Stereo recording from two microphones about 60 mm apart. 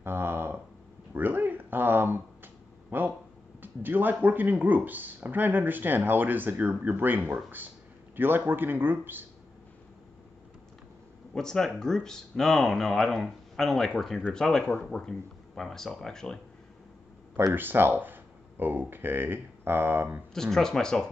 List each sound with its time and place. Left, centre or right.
0.0 s a sound: right
3.6 s speech: right
11.3 s speech: centre
17.5 s speech: right
20.3 s speech: centre